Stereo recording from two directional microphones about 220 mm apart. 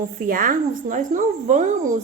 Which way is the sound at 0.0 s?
40° right (ahead or behind).